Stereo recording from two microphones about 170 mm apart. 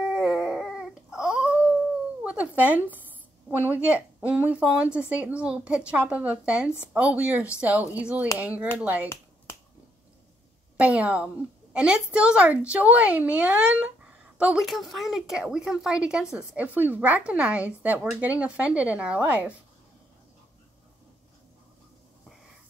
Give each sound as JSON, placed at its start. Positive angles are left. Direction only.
{"t": 0.1, "sound": "dog", "side_deg": -5}
{"t": 2.2, "sound": "a woman's voice", "side_deg": -10}
{"t": 10.8, "sound": "a woman's voice", "side_deg": -5}